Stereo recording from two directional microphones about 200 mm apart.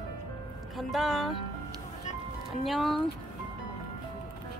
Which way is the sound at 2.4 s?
Centre (ahead or behind).